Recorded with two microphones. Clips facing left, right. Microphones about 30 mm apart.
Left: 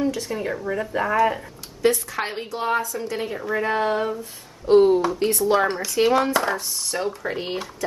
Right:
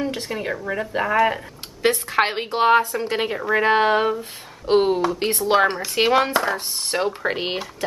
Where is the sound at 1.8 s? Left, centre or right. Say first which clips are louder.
Right 2 dB; right.